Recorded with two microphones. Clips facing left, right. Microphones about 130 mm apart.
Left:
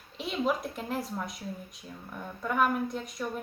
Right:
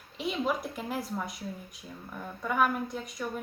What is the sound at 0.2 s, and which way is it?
A woman's voice, centre (ahead or behind).